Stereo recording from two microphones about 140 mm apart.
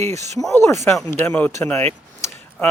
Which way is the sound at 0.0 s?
55° right (ahead or behind).